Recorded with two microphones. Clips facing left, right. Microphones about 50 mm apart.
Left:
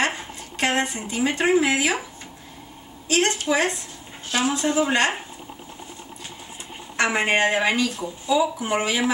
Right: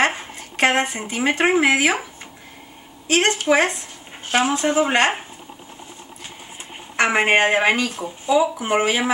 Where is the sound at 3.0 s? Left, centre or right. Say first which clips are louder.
Right 4 dB; right.